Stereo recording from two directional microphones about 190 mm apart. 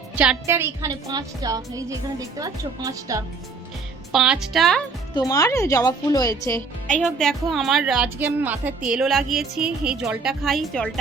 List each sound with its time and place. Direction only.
0.2 s a woman's voice: 10° right (ahead or behind)
4.1 s a woman's voice: centre (ahead or behind)
5.1 s a woman's voice: 20° left (ahead or behind)
6.8 s a woman's voice: 5° left (ahead or behind)